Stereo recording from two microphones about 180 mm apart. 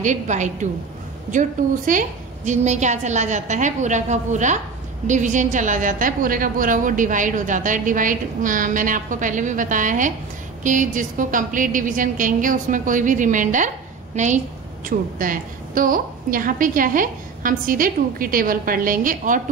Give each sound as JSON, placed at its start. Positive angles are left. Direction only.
{"t": 0.0, "sound": "a woman's voice", "side_deg": -40}
{"t": 1.9, "sound": "a woman's voice", "side_deg": -45}